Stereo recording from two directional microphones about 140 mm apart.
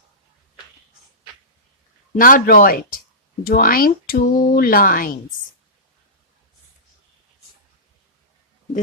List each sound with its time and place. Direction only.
2.1 s a man's voice: 80° left